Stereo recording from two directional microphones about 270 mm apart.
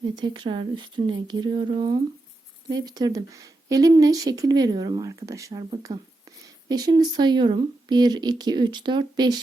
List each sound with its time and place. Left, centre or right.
0.0 s a woman's voice: centre